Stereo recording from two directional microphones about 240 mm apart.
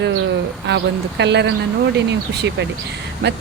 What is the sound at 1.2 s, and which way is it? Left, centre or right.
Speech, right.